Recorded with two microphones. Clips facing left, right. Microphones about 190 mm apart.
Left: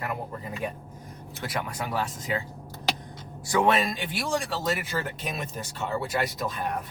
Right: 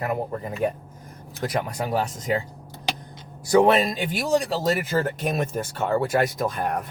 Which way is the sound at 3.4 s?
45° right (ahead or behind).